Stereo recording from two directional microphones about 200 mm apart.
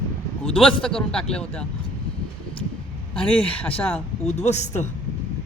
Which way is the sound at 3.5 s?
10° left (ahead or behind).